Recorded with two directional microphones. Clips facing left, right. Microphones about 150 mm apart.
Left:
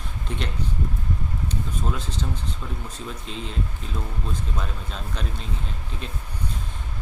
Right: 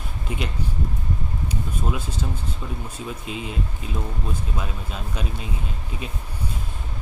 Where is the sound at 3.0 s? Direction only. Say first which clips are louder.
Right 3 dB; 10° right (ahead or behind).